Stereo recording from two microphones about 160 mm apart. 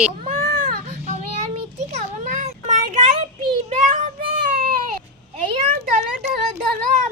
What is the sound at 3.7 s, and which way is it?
Child singing, 50° right (ahead or behind).